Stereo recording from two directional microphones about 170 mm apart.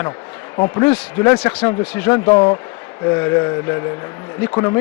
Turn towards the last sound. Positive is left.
turn(degrees=15)  # may be behind; listen again after turning